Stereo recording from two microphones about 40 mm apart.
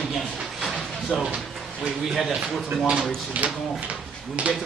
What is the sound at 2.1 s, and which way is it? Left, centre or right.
Speech, centre.